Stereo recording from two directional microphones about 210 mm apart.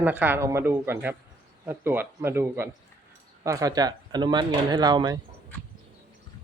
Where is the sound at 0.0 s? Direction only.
10° right (ahead or behind).